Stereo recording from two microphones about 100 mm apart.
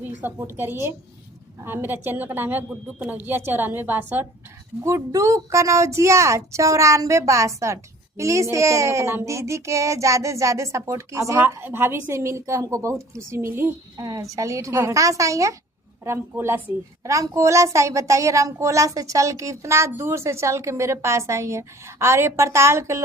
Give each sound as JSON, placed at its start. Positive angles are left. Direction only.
{"t": 0.0, "sound": "a woman's voice", "side_deg": -20}
{"t": 4.8, "sound": "a woman's voice", "side_deg": -30}
{"t": 14.0, "sound": "a woman's voice", "side_deg": -35}